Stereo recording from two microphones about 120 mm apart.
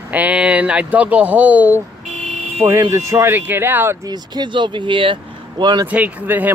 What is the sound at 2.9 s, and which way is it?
Speech, 25° right (ahead or behind).